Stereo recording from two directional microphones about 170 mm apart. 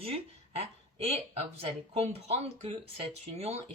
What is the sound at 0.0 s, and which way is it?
Speech, 35° right (ahead or behind).